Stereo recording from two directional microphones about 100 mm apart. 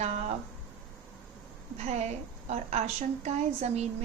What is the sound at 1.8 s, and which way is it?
A woman's voice, 90° right.